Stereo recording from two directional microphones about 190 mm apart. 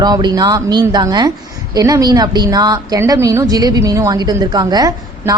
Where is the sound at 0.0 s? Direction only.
20° right (ahead or behind).